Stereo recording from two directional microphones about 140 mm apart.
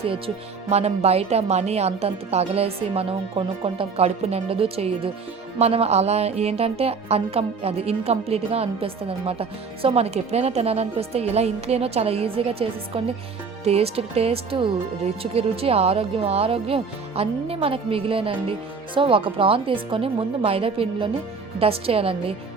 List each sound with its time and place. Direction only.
0.7 s speech: 50° right (ahead or behind)